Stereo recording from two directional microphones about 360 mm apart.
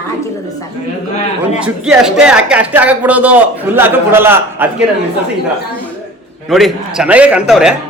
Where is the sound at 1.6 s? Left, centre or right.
Centre.